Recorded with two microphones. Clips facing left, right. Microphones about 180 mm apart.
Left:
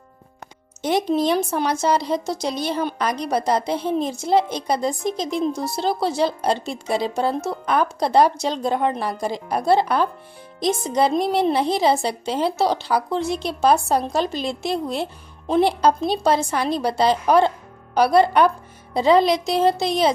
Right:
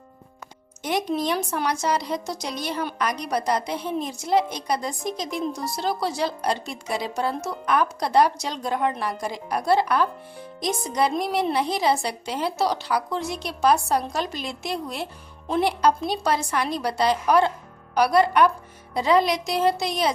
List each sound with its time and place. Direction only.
0.8 s speech: 30° left (ahead or behind)